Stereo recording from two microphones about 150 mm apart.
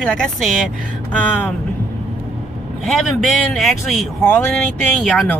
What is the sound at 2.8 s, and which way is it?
Speech, centre (ahead or behind).